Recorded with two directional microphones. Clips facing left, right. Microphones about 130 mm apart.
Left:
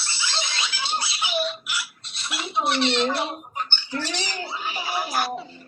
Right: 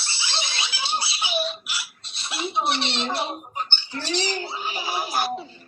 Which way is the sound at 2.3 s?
20° right (ahead or behind).